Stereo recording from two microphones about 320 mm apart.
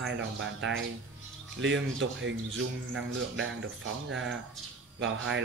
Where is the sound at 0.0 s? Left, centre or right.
Right.